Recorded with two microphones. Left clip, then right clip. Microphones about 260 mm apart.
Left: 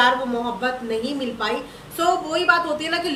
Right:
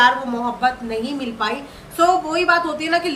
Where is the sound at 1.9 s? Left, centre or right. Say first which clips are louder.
Right 4 dB; centre.